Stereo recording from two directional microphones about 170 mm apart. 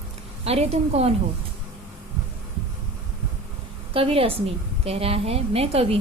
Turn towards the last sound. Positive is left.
turn(degrees=-35)  # may be behind; listen again after turning